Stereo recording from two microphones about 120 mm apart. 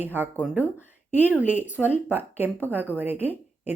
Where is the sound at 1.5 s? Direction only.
15° right (ahead or behind).